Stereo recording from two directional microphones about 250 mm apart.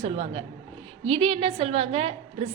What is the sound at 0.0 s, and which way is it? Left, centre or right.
A woman's voice, right.